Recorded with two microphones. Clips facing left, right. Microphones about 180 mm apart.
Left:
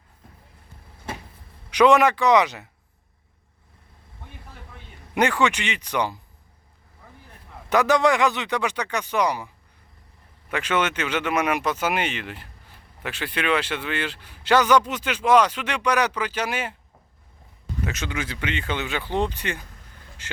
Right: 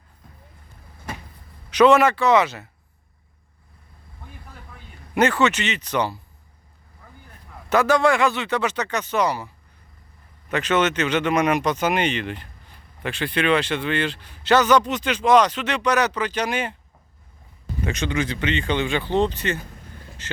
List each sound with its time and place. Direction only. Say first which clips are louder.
1.7 s speech: right 2 dB; 15° left (ahead or behind)
4.7 s speech: right 3 dB; 15° left (ahead or behind)
7.7 s speech: right 1 dB; 15° left (ahead or behind)
10.5 s speech: right 3 dB; 10° left (ahead or behind)
17.8 s speech: right 6 dB; 5° left (ahead or behind)